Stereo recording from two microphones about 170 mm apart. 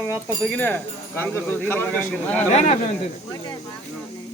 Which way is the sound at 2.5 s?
45° left (ahead or behind).